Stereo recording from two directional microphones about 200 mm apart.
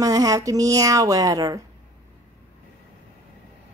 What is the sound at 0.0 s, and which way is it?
Speech, 15° right (ahead or behind).